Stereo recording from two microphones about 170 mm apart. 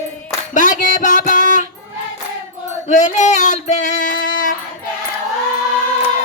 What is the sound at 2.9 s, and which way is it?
Music, 45° left (ahead or behind).